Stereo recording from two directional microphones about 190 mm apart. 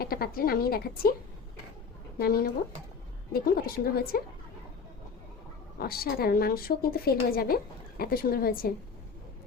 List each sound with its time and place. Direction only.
0.0 s speech: 50° left (ahead or behind)
2.1 s speech: 50° left (ahead or behind)
5.8 s speech: 50° left (ahead or behind)